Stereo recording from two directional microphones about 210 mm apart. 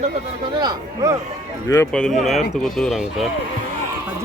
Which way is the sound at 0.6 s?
20° right (ahead or behind).